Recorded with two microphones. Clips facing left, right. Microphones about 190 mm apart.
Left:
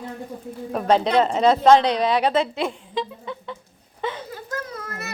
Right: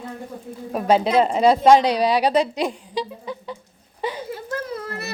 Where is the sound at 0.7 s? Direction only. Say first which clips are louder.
Right 1 dB; 5° right (ahead or behind).